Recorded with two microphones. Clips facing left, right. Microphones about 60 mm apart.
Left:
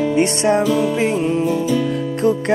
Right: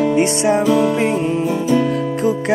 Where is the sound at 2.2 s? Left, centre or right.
Centre.